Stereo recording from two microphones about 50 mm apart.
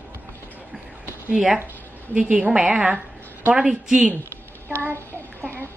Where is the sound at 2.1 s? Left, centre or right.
Right.